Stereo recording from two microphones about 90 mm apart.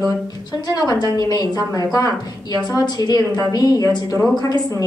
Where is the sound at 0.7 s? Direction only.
45° left (ahead or behind).